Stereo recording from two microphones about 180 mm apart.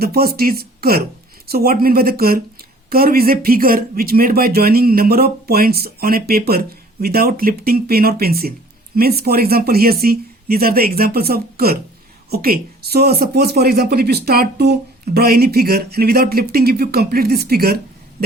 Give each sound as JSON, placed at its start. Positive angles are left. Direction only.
{"t": 0.0, "sound": "speech", "side_deg": -60}